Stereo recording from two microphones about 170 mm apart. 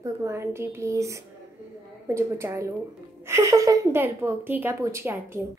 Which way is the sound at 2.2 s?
15° right (ahead or behind).